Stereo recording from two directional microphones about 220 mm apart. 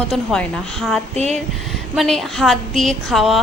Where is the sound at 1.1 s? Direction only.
30° right (ahead or behind).